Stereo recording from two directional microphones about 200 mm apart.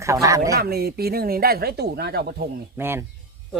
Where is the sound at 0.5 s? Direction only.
50° right (ahead or behind).